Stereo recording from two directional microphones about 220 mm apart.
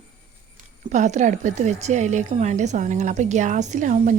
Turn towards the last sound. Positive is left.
turn(degrees=-35)  # may be behind; listen again after turning